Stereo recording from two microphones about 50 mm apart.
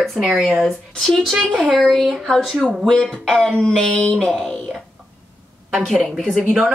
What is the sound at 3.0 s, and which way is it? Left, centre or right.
Speech, centre.